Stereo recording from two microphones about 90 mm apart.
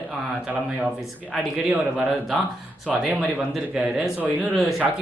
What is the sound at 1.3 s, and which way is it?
Speech, 10° right (ahead or behind).